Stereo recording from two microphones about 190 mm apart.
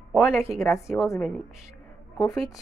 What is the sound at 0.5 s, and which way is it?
Speech, 15° left (ahead or behind).